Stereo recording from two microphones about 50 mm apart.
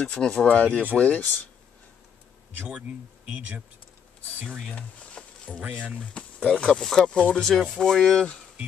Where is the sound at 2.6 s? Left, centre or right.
Right.